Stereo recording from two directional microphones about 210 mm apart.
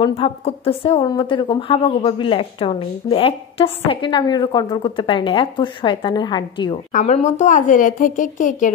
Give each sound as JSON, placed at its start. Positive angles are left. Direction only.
{"t": 0.0, "sound": "a woman's voice", "side_deg": 25}
{"t": 6.9, "sound": "a woman's voice", "side_deg": 35}